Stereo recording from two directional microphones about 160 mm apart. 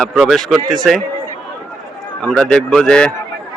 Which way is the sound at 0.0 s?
Centre (ahead or behind).